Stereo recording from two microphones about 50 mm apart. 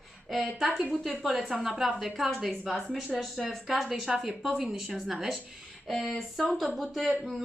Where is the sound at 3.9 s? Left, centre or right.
Centre.